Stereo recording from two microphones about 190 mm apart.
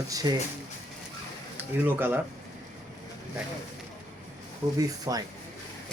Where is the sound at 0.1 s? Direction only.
20° right (ahead or behind).